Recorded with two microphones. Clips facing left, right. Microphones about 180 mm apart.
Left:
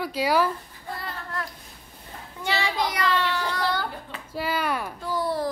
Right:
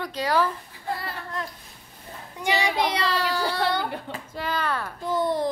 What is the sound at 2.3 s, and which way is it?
Speech, 15° right (ahead or behind).